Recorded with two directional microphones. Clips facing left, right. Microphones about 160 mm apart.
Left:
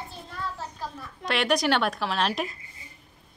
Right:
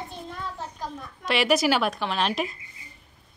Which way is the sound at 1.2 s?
5° right (ahead or behind).